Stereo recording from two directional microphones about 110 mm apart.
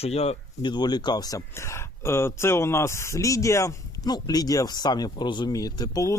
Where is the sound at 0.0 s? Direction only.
70° left (ahead or behind).